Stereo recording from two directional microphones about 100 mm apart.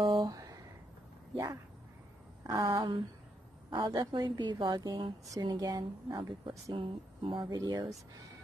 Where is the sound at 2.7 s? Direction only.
55° right (ahead or behind).